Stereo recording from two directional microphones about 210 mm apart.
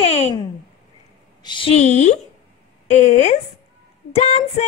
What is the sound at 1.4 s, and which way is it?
Speech, 25° left (ahead or behind).